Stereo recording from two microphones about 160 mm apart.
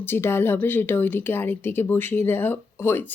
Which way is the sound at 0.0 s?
15° left (ahead or behind).